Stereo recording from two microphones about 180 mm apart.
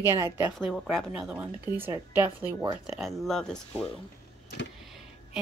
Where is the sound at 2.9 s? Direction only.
Centre (ahead or behind).